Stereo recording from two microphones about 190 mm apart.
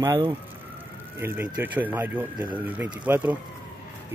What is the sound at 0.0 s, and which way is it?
Speech, 20° right (ahead or behind).